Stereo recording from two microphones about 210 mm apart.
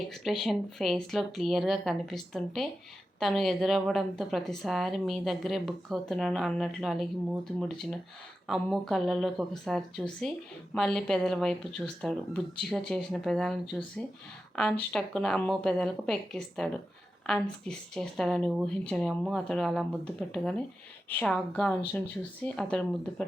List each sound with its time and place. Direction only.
0.1 s a woman's voice: centre (ahead or behind)